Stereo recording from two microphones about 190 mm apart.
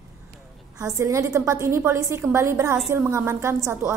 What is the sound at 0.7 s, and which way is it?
A woman's voice, 20° right (ahead or behind).